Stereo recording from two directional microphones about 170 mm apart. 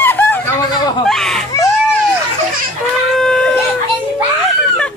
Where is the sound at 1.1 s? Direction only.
Centre (ahead or behind).